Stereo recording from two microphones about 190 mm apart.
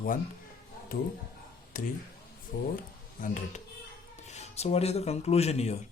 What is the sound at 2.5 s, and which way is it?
Speech, 55° left (ahead or behind).